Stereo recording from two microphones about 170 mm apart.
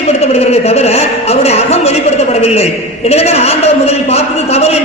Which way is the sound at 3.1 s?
40° left (ahead or behind).